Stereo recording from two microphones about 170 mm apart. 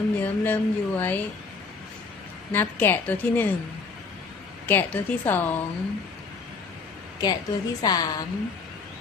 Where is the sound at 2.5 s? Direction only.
10° left (ahead or behind).